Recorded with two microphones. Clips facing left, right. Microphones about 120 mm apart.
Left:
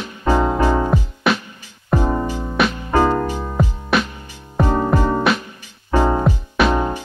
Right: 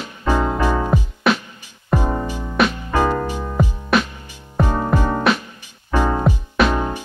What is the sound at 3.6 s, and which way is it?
Music, centre (ahead or behind).